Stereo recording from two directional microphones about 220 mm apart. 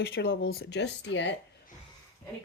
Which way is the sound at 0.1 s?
50° left (ahead or behind).